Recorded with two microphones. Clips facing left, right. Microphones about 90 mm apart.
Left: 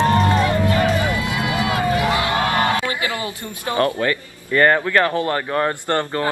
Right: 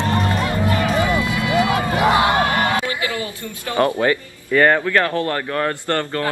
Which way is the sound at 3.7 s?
20° right (ahead or behind).